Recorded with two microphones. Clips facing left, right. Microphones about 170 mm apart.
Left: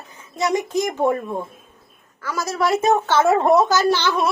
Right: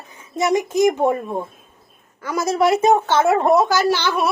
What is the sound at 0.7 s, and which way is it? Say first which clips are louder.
Speech: right 5 dB; 15° right (ahead or behind).